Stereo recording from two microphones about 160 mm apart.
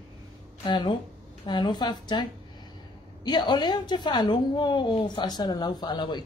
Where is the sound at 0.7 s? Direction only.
30° left (ahead or behind).